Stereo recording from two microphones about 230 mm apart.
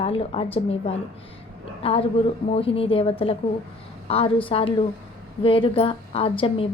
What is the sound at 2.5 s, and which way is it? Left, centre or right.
A woman's voice, left.